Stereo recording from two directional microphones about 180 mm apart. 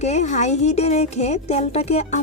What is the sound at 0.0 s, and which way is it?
Speech, 40° left (ahead or behind).